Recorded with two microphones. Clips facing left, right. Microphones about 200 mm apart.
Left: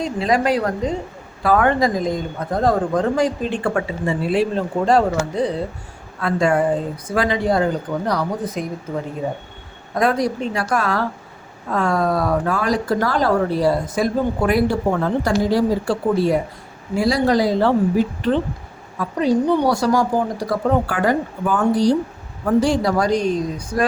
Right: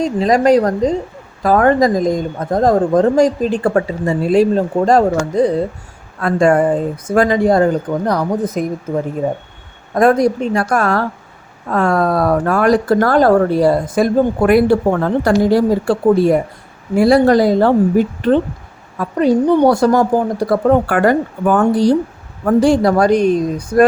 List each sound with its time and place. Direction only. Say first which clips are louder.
0.0 s a woman's voice: right 6 dB; 40° right (ahead or behind)
9.9 s a man's voice: right 7 dB; 50° right (ahead or behind)